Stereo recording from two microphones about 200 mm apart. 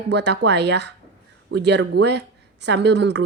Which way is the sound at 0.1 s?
60° right (ahead or behind).